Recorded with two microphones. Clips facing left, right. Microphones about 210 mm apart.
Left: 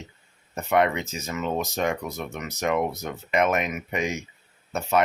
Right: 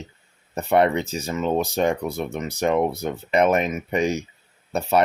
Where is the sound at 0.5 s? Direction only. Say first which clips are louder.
Right 4 dB; 35° right (ahead or behind).